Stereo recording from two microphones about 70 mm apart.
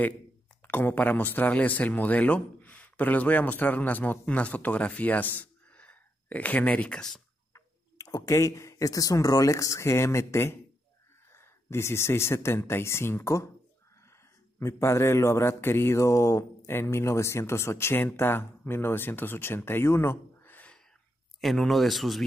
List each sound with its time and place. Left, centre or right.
0.7 s a man's voice: left; by 7.2 s centre
7.5 s speech: left
14.6 s speech: left
21.4 s speech: centre